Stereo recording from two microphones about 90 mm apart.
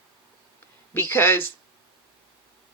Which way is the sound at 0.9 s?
25° left (ahead or behind).